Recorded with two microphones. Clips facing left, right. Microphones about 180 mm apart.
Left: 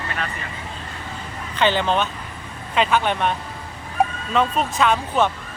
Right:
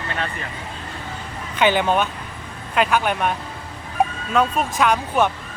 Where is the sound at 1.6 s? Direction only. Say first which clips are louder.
Right 2 dB; 10° right (ahead or behind).